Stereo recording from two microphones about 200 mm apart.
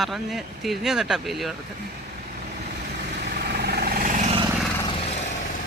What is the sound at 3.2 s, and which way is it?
Vehicle, 55° right (ahead or behind).